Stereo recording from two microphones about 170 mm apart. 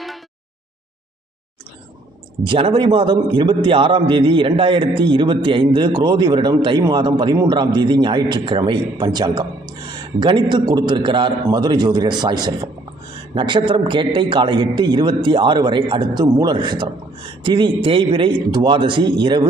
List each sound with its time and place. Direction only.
2.4 s a man's voice: 30° right (ahead or behind)